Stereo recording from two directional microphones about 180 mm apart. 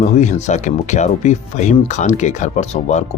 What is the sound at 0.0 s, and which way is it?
Speech, 40° left (ahead or behind).